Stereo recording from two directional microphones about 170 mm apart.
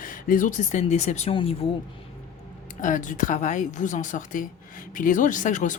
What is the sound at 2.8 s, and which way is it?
Speech, 50° left (ahead or behind).